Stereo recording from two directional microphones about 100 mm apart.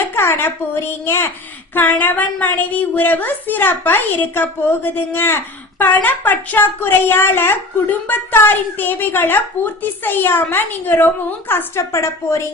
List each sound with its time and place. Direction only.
0.0 s a woman's voice: 20° left (ahead or behind)